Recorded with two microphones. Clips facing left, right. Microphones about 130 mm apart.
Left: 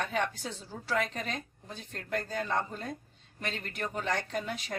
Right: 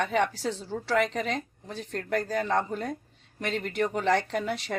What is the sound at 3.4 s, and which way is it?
A woman's voice, 75° right (ahead or behind).